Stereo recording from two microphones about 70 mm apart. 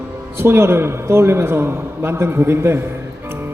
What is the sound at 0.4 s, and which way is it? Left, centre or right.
A man's voice, right.